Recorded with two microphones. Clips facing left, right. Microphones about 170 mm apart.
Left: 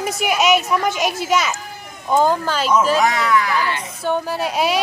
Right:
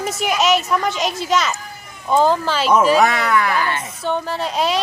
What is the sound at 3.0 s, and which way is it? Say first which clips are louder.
Speech: right 1 dB; 65° right (ahead or behind).